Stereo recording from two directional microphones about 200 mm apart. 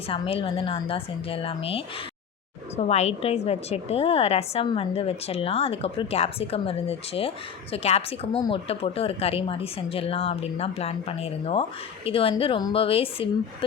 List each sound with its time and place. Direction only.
0.1 s a woman's voice: 25° left (ahead or behind)